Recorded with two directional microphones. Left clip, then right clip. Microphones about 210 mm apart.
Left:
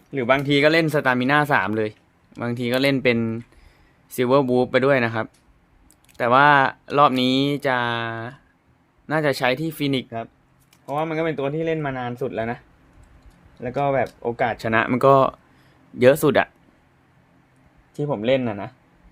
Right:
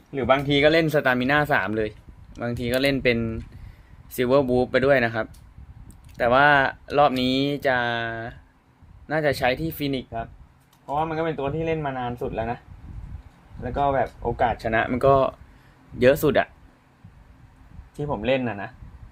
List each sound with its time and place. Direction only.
0.1 s speech: 20° left (ahead or behind)
13.7 s speech: 30° left (ahead or behind)
17.9 s speech: 30° left (ahead or behind)